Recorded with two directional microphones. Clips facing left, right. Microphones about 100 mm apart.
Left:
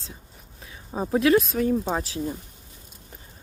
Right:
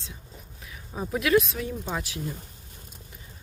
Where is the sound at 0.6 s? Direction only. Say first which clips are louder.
Left 5 dB; 30° left (ahead or behind).